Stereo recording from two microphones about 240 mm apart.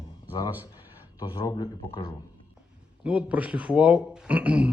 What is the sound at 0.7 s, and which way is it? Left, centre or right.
Speech, centre.